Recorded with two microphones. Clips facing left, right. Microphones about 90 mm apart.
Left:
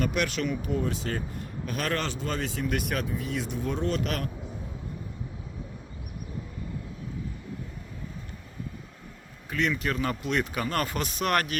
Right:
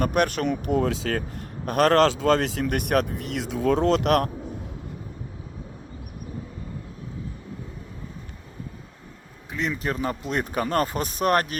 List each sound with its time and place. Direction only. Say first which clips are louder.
0.0 s speech: right 5 dB; 50° right (ahead or behind); by 1.2 s 90° right
1.6 s speech: right 12 dB; 55° right (ahead or behind)
9.5 s speech: even; 25° right (ahead or behind)